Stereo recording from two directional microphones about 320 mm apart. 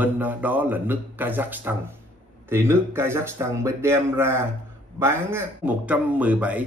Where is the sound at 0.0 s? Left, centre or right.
Centre.